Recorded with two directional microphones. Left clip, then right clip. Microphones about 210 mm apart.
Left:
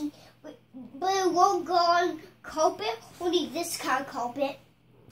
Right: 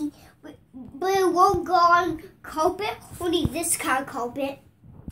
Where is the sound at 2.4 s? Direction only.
5° left (ahead or behind).